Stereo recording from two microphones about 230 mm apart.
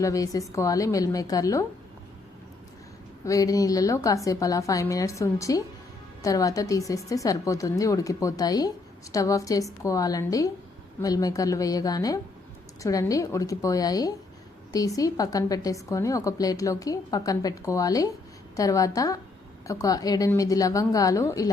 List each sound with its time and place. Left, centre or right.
0.0 s a woman's voice: centre
3.2 s a woman's voice: centre